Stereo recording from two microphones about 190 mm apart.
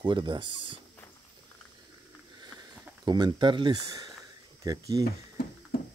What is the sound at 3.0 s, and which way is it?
Speech, 20° right (ahead or behind).